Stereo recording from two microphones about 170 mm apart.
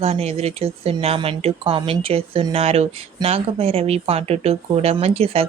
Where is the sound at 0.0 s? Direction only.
35° right (ahead or behind).